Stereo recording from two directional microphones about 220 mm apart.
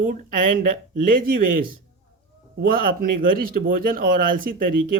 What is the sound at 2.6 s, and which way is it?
Speech, 40° right (ahead or behind).